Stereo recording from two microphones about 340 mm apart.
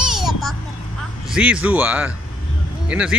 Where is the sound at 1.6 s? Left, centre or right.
Centre.